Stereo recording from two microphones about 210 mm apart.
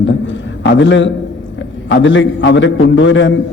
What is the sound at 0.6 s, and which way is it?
A man's voice, 60° left (ahead or behind).